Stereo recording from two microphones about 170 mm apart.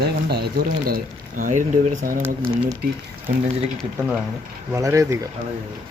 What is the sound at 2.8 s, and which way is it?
Speech, 65° right (ahead or behind).